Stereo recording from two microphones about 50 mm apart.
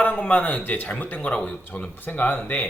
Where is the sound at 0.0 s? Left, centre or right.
Left.